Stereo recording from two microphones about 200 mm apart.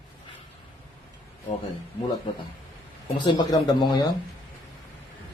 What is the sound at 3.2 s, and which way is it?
Speech, 20° left (ahead or behind).